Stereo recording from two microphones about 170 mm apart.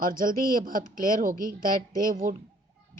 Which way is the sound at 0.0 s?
55° right (ahead or behind).